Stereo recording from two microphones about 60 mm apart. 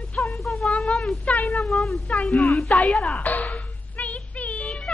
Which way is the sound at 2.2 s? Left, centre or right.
Centre.